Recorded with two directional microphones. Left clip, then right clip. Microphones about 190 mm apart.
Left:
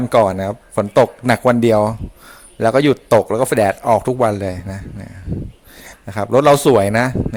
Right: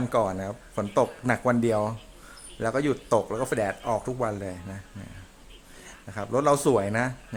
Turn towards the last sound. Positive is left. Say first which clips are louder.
# left 11 dB
turn(degrees=45)  # may be behind; listen again after turning